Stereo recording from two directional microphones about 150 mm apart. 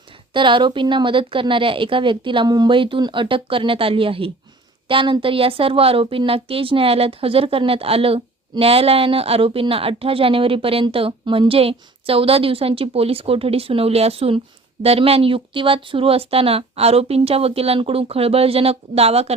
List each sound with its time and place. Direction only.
0.3 s speech: 30° right (ahead or behind)